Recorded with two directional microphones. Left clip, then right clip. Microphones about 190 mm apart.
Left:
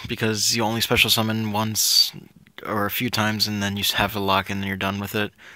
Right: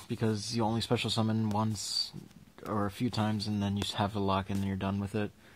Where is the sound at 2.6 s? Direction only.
30° left (ahead or behind).